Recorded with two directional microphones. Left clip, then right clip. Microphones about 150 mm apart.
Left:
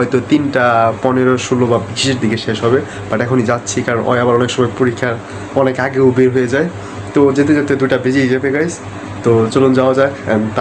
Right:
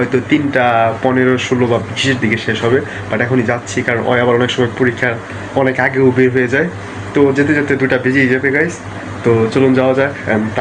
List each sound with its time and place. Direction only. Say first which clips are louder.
0.3 s speech: even; 20° left (ahead or behind)
7.2 s speech: left 1 dB; 20° left (ahead or behind)